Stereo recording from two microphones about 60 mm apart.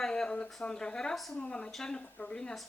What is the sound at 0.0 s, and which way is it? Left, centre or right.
Speech, centre.